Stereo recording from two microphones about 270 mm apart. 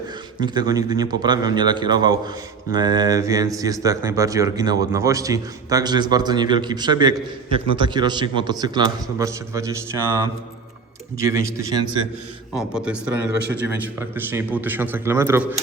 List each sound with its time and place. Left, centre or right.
0.3 s speech: centre
12.5 s a man's voice: centre